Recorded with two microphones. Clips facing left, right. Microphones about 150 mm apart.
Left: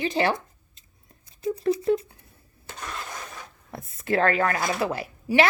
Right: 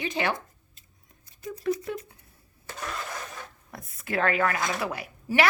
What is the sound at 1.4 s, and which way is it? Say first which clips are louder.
Speech: left 5 dB; 25° left (ahead or behind).